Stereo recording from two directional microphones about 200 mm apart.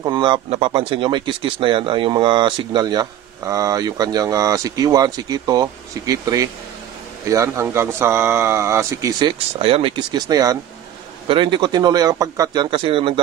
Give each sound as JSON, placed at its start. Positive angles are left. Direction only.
{"t": 0.0, "sound": "speech", "side_deg": -25}
{"t": 9.6, "sound": "speech", "side_deg": -30}